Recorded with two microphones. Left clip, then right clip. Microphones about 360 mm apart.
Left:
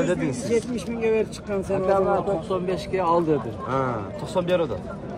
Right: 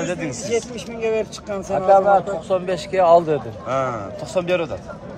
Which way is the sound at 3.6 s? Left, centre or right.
Centre.